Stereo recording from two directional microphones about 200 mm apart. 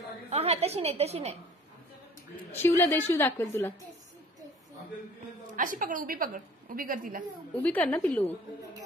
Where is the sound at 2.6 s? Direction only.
15° left (ahead or behind).